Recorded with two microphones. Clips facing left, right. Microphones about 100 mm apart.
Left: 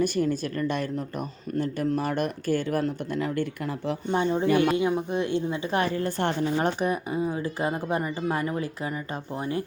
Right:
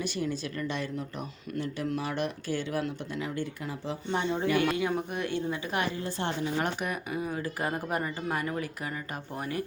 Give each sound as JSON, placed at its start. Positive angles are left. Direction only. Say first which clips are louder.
{"t": 0.0, "sound": "speech", "louder": "left 7 dB", "side_deg": 50}
{"t": 4.4, "sound": "speech", "louder": "left 5 dB", "side_deg": 30}
{"t": 5.7, "sound": "a woman's voice", "louder": "left 6 dB", "side_deg": 40}
{"t": 6.0, "sound": "a woman's voice", "louder": "left 6 dB", "side_deg": 55}
{"t": 6.6, "sound": "speech", "louder": "left 6 dB", "side_deg": 30}